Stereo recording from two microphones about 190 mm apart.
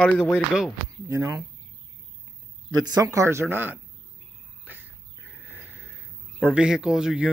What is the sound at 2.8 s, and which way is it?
Speech, 15° right (ahead or behind).